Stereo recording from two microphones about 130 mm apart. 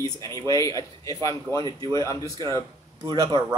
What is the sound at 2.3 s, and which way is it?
Speech, 30° right (ahead or behind).